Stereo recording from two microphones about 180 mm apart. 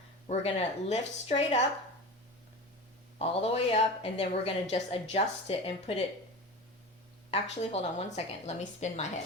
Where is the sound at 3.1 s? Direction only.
35° left (ahead or behind).